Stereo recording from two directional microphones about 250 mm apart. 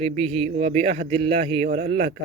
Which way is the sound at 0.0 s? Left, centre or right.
Right.